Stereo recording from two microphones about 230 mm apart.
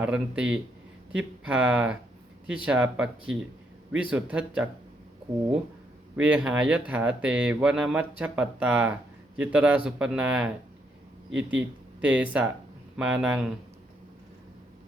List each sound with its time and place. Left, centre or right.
0.0 s speech: centre
6.1 s speech: centre